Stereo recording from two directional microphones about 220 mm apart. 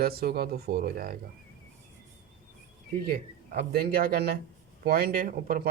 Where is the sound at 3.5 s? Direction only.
45° right (ahead or behind).